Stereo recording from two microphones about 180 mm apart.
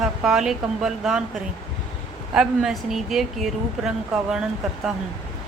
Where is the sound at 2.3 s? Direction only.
5° right (ahead or behind).